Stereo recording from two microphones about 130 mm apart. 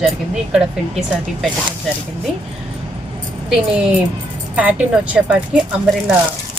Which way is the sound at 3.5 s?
10° right (ahead or behind).